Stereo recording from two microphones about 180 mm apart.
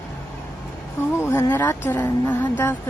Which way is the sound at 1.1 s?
15° left (ahead or behind).